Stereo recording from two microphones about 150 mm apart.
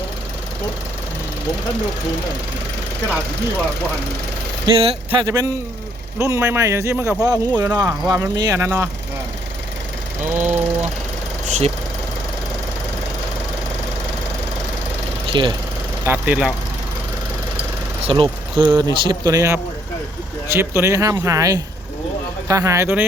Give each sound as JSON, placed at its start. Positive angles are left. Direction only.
{"t": 4.6, "sound": "speech", "side_deg": -35}
{"t": 5.2, "sound": "speech", "side_deg": -20}
{"t": 10.2, "sound": "a sound", "side_deg": -10}
{"t": 11.4, "sound": "engine", "side_deg": -50}
{"t": 15.3, "sound": "speech", "side_deg": -35}
{"t": 16.0, "sound": "speech", "side_deg": -10}
{"t": 18.0, "sound": "speech", "side_deg": -35}